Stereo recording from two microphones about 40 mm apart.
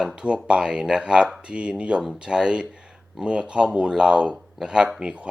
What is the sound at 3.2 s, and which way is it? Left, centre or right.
Speech, right.